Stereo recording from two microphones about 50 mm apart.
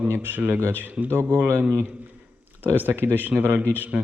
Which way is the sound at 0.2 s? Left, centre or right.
Right.